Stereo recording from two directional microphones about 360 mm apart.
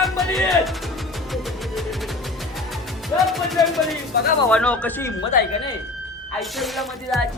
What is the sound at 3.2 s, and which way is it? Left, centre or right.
Speech, centre.